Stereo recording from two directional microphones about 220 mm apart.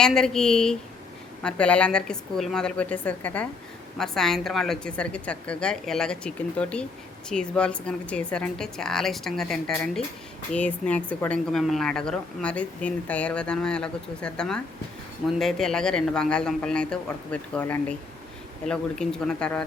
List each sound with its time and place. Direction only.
0.0 s a woman's voice: centre (ahead or behind)